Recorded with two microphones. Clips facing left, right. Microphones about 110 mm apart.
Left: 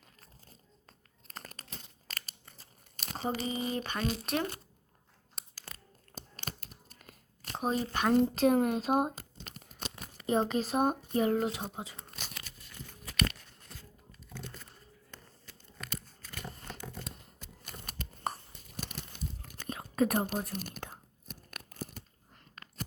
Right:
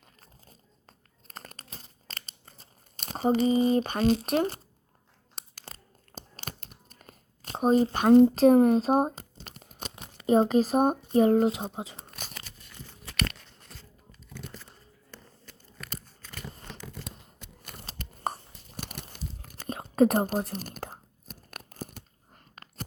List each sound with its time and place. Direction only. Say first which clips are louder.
1.3 s crumpling: right 2 dB; 30° right (ahead or behind)
3.1 s speech: right 11 dB; 30° right (ahead or behind)
5.6 s tearing: right 3 dB; 30° right (ahead or behind)
6.6 s crunch: right 2 dB; 45° right (ahead or behind)
7.5 s speech: right 9 dB; 30° right (ahead or behind)
9.9 s a sound: right 7 dB; 20° right (ahead or behind)
10.5 s speech: right 6 dB; 40° right (ahead or behind)
17.8 s crunch: right 4 dB; 30° right (ahead or behind)
18.8 s a sound: right 2 dB; 50° right (ahead or behind)
19.1 s tearing: right 1 dB; 45° right (ahead or behind)
19.6 s whispering: right 7 dB; 30° right (ahead or behind)
20.4 s tearing: right 4 dB; 35° right (ahead or behind)